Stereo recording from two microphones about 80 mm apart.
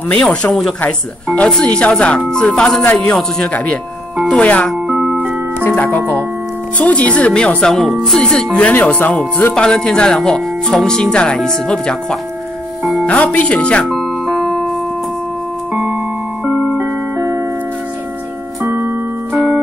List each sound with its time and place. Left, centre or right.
0.1 s speech: centre
4.8 s music: centre
5.6 s speech: left; by 8.5 s centre
8.8 s speech: centre
13.8 s music: centre
15.7 s music: centre
16.4 s music: centre
17.2 s music: right
18.6 s music: right
19.3 s music: centre